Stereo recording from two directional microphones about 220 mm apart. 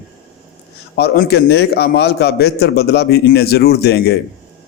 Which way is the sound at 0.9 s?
45° left (ahead or behind).